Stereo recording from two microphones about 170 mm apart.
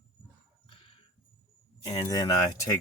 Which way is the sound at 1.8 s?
20° left (ahead or behind).